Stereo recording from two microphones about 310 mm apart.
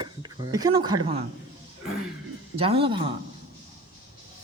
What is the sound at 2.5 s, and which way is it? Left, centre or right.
Speech, centre.